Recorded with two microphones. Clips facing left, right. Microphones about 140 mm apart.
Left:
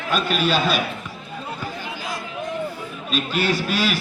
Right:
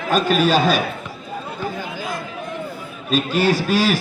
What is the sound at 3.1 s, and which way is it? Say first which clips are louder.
Speech: right 4 dB; 40° right (ahead or behind).